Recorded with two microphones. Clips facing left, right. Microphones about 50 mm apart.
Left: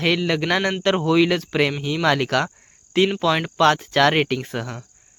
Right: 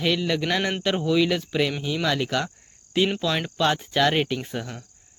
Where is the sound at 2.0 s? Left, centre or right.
Left.